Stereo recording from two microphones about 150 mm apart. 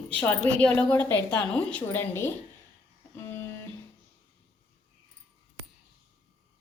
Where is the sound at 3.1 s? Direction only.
20° left (ahead or behind).